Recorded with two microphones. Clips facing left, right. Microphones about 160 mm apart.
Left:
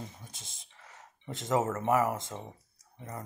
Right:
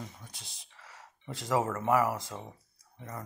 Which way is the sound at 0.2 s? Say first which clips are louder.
Even; 20° left (ahead or behind).